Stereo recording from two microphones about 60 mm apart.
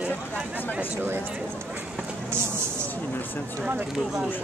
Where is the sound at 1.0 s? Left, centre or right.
Right.